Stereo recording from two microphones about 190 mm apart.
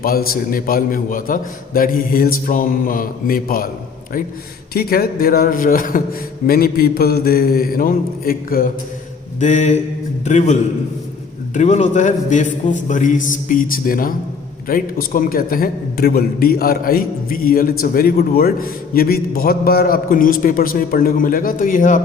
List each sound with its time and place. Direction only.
0.0 s a man's voice: 50° left (ahead or behind)
4.7 s a man's voice: 55° left (ahead or behind)
9.4 s a man's voice: 40° left (ahead or behind)